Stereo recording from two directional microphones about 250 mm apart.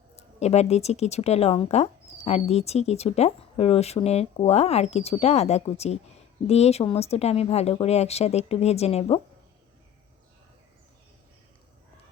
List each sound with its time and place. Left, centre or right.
0.2 s speech: left